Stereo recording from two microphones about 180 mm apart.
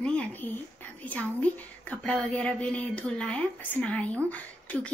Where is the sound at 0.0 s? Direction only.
5° left (ahead or behind).